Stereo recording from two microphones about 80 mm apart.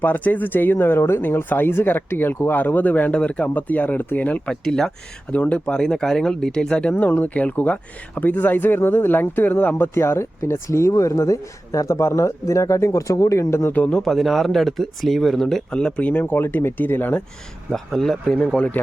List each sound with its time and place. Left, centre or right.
0.0 s speech: left
4.6 s speech: centre; by 13.7 s left
13.7 s speech: centre
14.0 s speech: centre; by 17.2 s left
17.7 s speech: centre
18.3 s speech: centre